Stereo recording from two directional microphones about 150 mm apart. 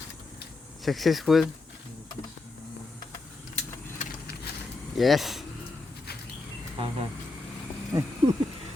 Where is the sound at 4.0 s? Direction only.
90° left.